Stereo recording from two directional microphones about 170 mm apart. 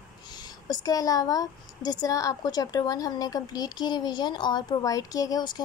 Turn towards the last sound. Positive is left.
turn(degrees=25)  # may be behind; listen again after turning